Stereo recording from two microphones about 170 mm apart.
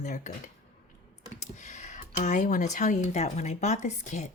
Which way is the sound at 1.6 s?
45° left (ahead or behind).